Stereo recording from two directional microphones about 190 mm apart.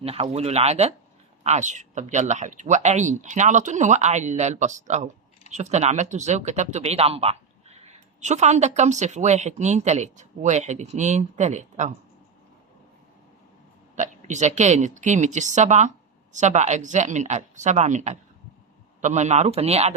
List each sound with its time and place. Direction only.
0.0 s speech: 30° right (ahead or behind)
13.9 s speech: 40° right (ahead or behind)